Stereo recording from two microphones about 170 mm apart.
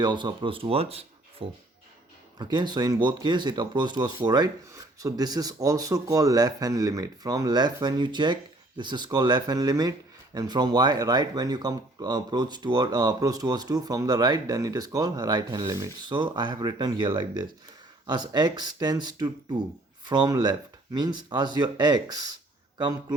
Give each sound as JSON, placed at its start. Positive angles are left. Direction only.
{"t": 0.0, "sound": "speech", "side_deg": -25}